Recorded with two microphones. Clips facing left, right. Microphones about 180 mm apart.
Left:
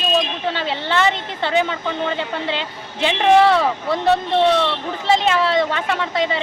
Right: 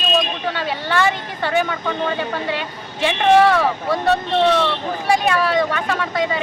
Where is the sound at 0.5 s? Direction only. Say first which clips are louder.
Even; 25° left (ahead or behind).